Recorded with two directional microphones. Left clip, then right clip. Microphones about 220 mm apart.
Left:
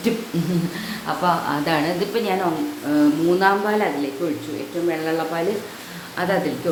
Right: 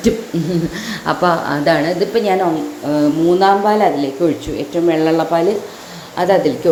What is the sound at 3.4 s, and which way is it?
Speech, 15° right (ahead or behind).